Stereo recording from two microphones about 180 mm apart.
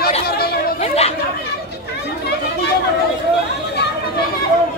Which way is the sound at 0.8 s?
35° left (ahead or behind).